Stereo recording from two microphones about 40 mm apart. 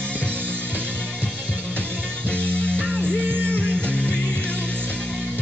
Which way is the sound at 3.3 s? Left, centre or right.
Right.